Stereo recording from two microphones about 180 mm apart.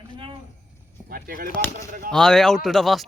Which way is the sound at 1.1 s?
55° right (ahead or behind).